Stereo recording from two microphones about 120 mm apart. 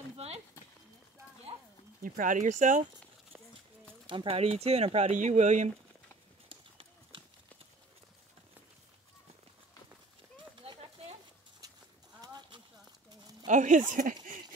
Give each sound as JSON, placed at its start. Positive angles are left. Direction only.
{"t": 2.0, "sound": "speech", "side_deg": -90}
{"t": 4.1, "sound": "speech", "side_deg": -50}
{"t": 6.5, "sound": "clip-clop", "side_deg": -45}
{"t": 10.6, "sound": "a sound", "side_deg": -50}
{"t": 11.6, "sound": "livestock", "side_deg": -30}
{"t": 12.2, "sound": "horse", "side_deg": -40}
{"t": 13.5, "sound": "speech", "side_deg": -90}